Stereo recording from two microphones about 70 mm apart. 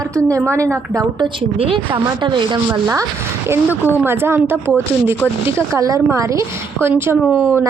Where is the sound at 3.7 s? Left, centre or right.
Left.